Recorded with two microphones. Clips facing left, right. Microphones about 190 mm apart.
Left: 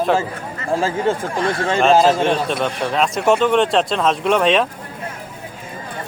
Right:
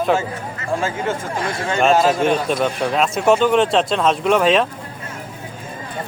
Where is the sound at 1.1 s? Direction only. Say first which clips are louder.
Left 6 dB; 35° left (ahead or behind).